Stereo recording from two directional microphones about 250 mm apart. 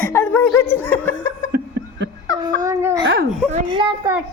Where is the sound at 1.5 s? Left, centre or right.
Right.